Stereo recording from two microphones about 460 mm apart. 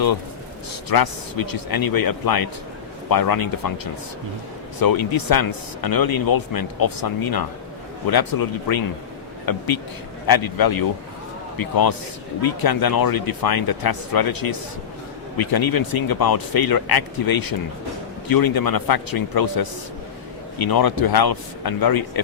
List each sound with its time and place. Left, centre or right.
0.9 s speech: left
4.8 s speech: left